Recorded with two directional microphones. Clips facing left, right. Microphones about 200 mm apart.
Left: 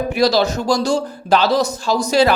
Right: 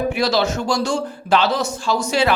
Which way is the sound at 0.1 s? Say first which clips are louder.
Left 3 dB; 35° left (ahead or behind).